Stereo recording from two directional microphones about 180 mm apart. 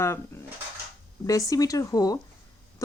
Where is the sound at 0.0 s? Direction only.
15° left (ahead or behind).